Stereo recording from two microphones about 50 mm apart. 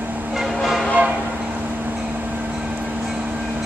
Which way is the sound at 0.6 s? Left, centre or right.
Centre.